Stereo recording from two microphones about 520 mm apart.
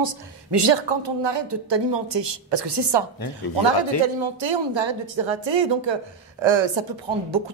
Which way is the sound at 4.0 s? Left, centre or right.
Right.